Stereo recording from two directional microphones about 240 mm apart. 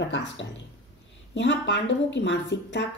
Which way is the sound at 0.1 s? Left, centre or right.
Left.